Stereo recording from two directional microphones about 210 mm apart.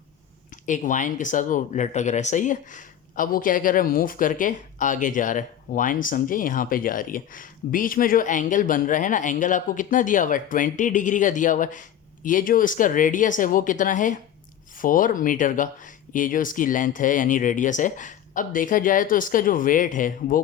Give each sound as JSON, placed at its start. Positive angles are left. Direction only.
{"t": 0.5, "sound": "speech", "side_deg": 35}